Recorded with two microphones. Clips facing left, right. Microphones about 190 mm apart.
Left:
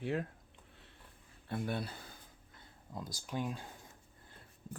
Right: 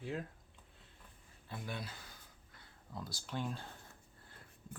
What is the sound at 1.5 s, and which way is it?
Speech, 55° left (ahead or behind).